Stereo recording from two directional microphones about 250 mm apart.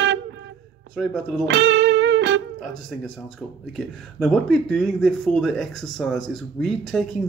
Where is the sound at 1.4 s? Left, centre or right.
Right.